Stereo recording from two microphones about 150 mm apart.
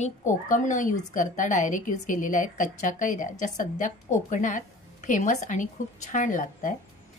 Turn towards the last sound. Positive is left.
turn(degrees=60)  # may be behind; listen again after turning